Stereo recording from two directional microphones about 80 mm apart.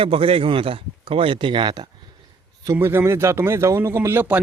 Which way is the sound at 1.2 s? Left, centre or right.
Right.